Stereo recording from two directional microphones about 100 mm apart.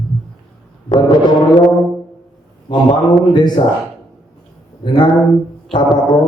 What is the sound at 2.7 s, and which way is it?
Speech, 45° left (ahead or behind).